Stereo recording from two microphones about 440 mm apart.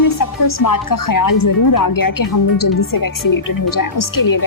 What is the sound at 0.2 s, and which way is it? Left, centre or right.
A woman's voice, left.